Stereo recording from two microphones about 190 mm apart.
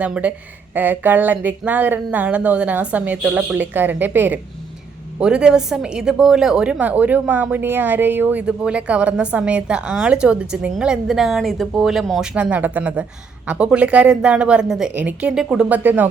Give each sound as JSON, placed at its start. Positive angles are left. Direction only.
{"t": 0.0, "sound": "a woman's voice", "side_deg": -5}